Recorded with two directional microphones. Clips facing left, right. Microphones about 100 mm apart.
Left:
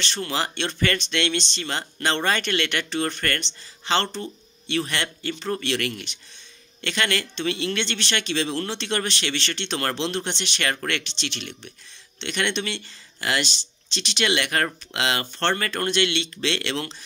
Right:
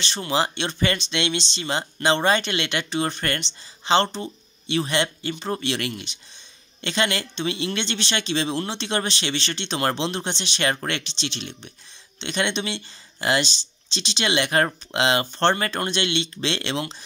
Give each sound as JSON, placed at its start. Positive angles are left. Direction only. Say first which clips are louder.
{"t": 0.0, "sound": "speech", "louder": "right 3 dB", "side_deg": -15}